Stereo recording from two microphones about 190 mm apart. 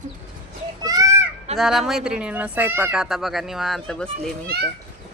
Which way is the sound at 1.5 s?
Centre (ahead or behind).